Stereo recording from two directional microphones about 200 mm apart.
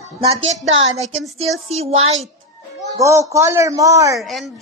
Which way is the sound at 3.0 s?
15° right (ahead or behind).